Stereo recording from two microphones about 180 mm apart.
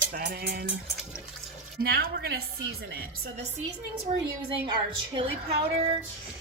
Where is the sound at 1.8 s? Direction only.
60° right (ahead or behind).